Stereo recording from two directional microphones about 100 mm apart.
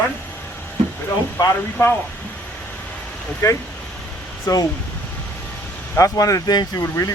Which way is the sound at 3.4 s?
30° left (ahead or behind).